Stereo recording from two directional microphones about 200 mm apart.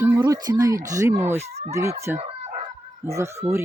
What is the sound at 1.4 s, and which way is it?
Speech, 35° right (ahead or behind).